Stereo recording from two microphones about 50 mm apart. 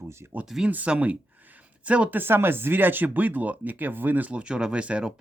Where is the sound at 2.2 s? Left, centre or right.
Right.